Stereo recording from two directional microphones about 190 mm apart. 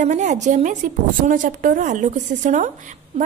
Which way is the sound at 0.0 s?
40° right (ahead or behind).